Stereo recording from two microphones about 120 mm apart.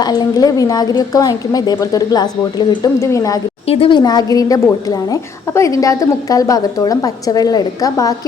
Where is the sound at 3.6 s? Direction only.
50° left (ahead or behind).